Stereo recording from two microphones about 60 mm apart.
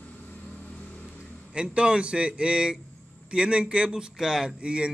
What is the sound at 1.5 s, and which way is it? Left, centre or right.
Speech, centre.